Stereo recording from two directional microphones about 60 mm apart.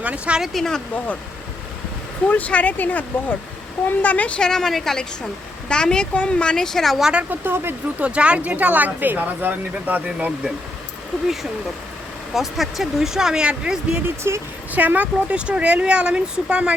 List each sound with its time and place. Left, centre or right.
0.0 s speech: right
0.5 s speech: centre
2.2 s speech: left
4.4 s speech: centre
7.0 s speech: centre
7.3 s speech: right
7.9 s speech: right
12.3 s speech: centre
14.3 s a woman's voice: right
14.7 s speech: right